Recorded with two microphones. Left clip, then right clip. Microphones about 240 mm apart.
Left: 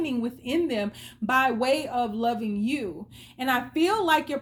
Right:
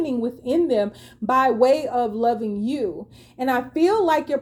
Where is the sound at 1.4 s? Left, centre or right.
Left.